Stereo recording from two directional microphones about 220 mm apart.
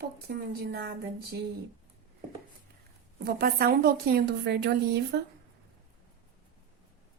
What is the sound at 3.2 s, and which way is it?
A woman's voice, 45° right (ahead or behind).